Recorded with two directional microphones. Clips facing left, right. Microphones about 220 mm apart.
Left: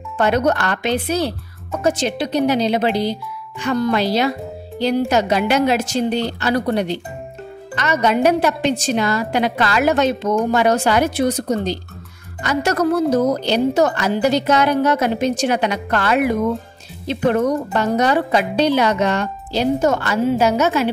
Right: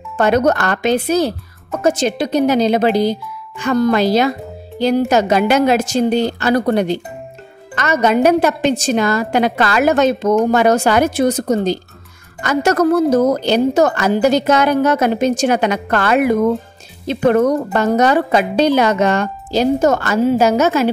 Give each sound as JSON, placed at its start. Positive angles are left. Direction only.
{"t": 0.2, "sound": "a woman's voice", "side_deg": -45}